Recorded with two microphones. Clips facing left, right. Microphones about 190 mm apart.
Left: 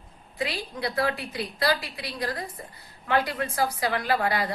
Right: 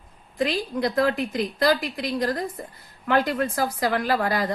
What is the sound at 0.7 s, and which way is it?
A woman's voice, 45° right (ahead or behind).